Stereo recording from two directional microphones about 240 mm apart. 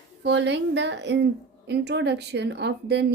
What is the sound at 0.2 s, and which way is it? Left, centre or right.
A woman's voice, right.